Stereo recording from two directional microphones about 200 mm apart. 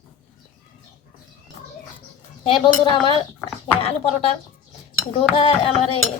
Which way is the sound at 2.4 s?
25° left (ahead or behind).